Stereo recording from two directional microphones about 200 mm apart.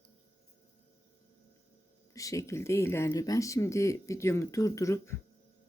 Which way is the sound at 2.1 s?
15° left (ahead or behind).